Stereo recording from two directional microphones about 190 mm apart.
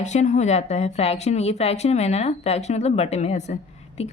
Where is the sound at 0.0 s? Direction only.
40° left (ahead or behind).